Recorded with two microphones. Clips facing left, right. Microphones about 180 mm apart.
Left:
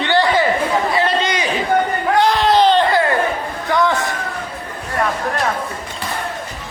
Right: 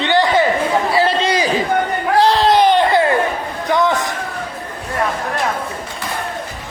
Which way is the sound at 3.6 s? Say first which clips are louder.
Right 1 dB; 20° right (ahead or behind).